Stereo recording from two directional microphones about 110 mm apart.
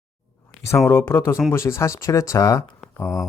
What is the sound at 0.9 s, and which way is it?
Speech, 20° left (ahead or behind).